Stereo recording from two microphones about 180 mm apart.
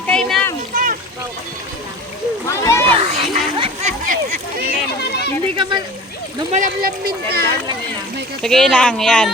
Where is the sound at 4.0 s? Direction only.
45° right (ahead or behind).